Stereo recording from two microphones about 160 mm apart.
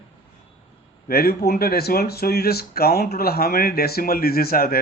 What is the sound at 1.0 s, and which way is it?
A man's voice, 75° left (ahead or behind).